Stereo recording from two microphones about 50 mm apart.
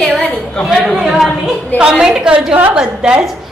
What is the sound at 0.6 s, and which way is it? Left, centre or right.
A woman's voice, centre.